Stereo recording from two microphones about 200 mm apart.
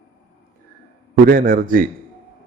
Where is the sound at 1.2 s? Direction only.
45° right (ahead or behind).